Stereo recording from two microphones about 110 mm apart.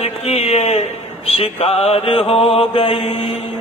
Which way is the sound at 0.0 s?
70° left (ahead or behind).